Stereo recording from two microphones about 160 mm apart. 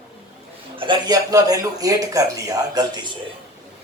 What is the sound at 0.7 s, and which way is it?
Speech, 30° right (ahead or behind).